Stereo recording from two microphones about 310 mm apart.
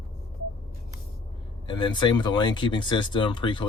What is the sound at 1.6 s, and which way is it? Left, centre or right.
Speech, centre.